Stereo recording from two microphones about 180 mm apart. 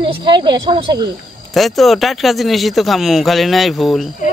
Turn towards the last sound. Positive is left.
turn(degrees=0)  # may be behind; listen again after turning